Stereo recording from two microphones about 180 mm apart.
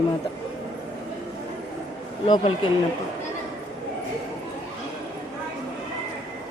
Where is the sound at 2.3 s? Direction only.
25° left (ahead or behind).